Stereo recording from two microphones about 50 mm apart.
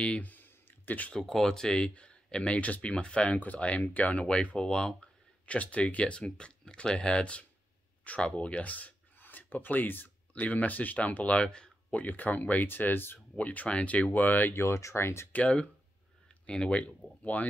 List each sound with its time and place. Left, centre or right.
0.0 s speech: left
0.3 s a sound: left
1.2 s speech: centre
5.6 s speech: left
11.4 s speech: centre
11.9 s speech: left
13.4 s speech: left
14.5 s speech: left
15.0 s speech: left
15.3 s speech: left
17.2 s speech: left